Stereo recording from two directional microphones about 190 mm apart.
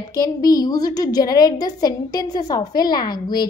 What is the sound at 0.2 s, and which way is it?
A woman's voice, 20° left (ahead or behind).